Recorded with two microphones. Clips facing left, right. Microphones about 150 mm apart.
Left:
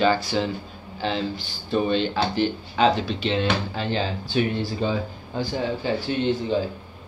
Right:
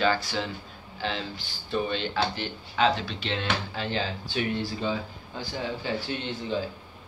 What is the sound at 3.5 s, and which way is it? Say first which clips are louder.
Speech: left 5 dB; 30° left (ahead or behind).